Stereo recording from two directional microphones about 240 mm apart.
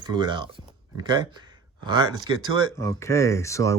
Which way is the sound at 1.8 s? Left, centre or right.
Centre.